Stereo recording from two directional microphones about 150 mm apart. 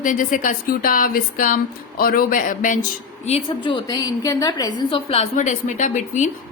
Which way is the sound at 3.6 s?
25° left (ahead or behind).